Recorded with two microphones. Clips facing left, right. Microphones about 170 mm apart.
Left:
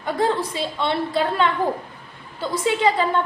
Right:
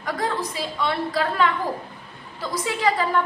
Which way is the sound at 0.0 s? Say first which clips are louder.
Left 4 dB; 25° left (ahead or behind).